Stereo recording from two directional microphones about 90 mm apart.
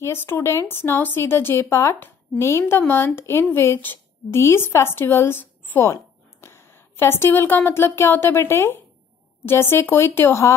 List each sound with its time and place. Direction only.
0.0 s a woman's voice: 30° left (ahead or behind)